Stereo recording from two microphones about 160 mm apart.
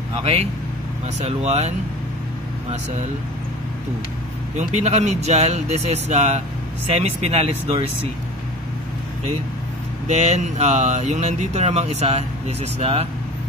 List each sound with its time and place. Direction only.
1.2 s speech: 40° right (ahead or behind)
4.6 s speech: 45° right (ahead or behind)
10.0 s speech: 45° right (ahead or behind)